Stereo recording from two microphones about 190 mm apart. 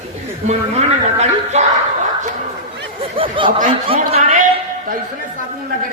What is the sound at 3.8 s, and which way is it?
Speech, 30° right (ahead or behind).